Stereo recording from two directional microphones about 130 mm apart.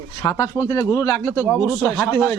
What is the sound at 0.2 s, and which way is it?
Speech, 25° left (ahead or behind).